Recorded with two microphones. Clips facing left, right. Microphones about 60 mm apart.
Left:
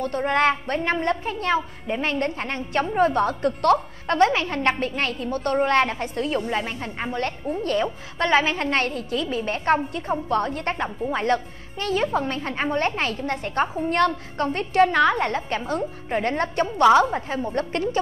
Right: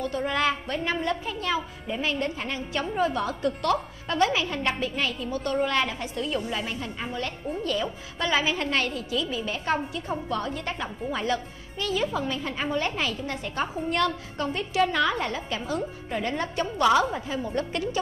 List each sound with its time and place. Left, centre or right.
0.2 s a woman's voice: left
16.8 s a woman's voice: left